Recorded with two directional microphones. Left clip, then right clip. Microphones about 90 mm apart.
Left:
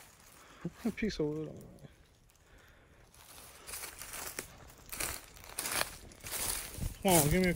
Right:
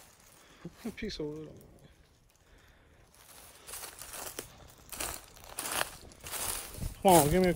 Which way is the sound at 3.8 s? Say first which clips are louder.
Right 1 dB; 15° right (ahead or behind).